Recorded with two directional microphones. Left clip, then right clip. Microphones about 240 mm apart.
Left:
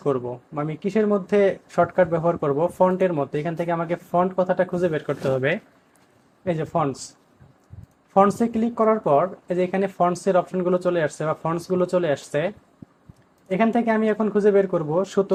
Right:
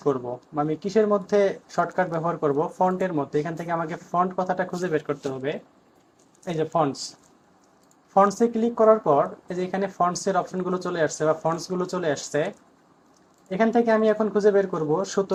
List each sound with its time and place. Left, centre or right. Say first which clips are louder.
0.0 s speech: left 1 dB; left
8.1 s speech: left 1 dB; left
13.7 s speech: right 1 dB; left